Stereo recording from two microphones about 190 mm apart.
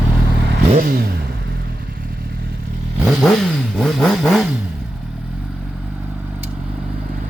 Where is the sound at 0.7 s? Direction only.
50° right (ahead or behind).